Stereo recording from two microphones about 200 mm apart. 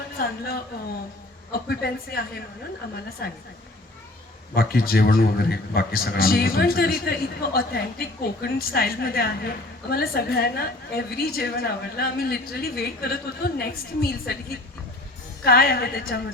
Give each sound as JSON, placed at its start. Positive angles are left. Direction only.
{"t": 0.2, "sound": "a man's voice", "side_deg": 50}
{"t": 4.5, "sound": "a man's voice", "side_deg": 50}
{"t": 15.4, "sound": "a man's voice", "side_deg": 50}